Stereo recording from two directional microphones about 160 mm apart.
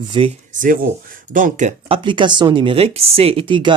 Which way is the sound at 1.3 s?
50° right (ahead or behind).